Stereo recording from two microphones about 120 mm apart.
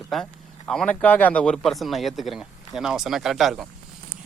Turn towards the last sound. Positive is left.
turn(degrees=0)  # may be behind; listen again after turning